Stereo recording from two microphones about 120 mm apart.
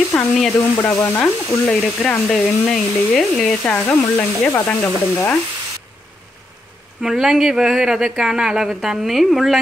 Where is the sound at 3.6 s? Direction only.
15° left (ahead or behind).